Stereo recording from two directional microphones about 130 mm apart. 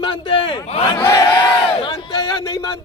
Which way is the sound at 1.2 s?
40° left (ahead or behind).